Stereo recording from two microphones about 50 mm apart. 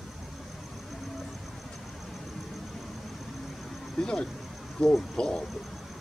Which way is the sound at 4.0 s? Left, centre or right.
Centre.